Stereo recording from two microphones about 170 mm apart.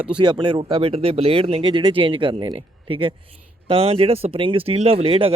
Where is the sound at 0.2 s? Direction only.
25° right (ahead or behind).